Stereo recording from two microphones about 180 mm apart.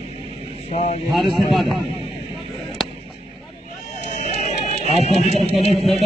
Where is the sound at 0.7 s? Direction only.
40° left (ahead or behind).